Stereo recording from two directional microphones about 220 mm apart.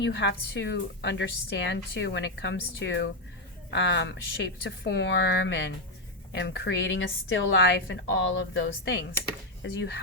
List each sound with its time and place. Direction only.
0.0 s a woman's voice: 50° left (ahead or behind)